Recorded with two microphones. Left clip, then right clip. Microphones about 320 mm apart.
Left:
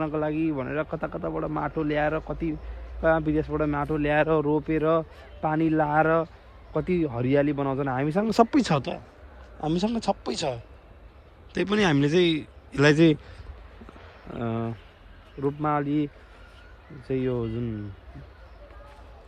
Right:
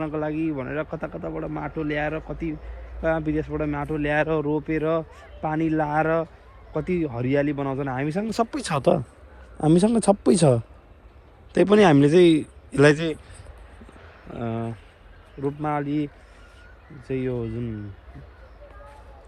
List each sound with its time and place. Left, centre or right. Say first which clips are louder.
0.0 s speech: even; centre
8.2 s speech: left 8 dB; left
9.7 s speech: right 7 dB; centre
11.5 s speech: right 7 dB; centre
14.3 s speech: right 1 dB; centre
17.1 s speech: even; centre